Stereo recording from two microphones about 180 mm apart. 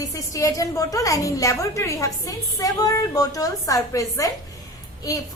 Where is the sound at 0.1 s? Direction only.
20° left (ahead or behind).